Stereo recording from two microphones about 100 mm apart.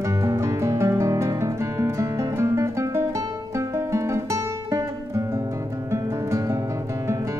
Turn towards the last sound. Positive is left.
turn(degrees=-30)  # may be behind; listen again after turning